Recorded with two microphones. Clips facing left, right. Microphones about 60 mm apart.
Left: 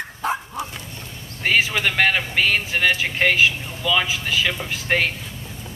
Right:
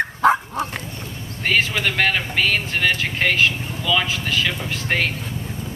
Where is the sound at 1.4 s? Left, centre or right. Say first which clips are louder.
Even; centre.